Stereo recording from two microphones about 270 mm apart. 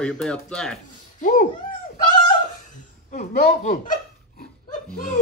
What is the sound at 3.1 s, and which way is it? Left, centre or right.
Speech, left.